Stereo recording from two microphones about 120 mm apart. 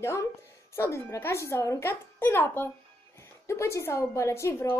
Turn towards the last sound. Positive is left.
turn(degrees=25)  # may be behind; listen again after turning